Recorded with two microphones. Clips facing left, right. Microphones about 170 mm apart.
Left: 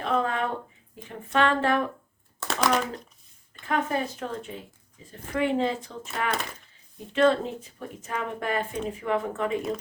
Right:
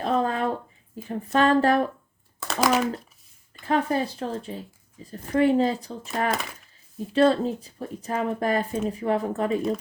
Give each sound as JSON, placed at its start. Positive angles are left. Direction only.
{"t": 0.0, "sound": "a sound", "side_deg": -35}
{"t": 1.0, "sound": "speech", "side_deg": -35}
{"t": 2.5, "sound": "speech", "side_deg": 0}
{"t": 3.7, "sound": "speech", "side_deg": -35}